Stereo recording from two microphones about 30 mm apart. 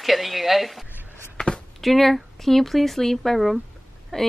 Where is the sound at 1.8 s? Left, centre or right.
Centre.